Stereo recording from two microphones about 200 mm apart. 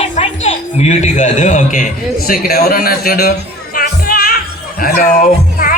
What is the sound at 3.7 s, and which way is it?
Music, 50° left (ahead or behind).